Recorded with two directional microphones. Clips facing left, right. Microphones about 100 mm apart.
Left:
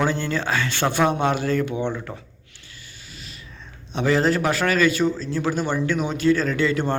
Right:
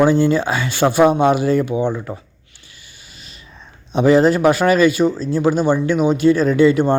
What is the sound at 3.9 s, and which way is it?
Speech, 15° right (ahead or behind).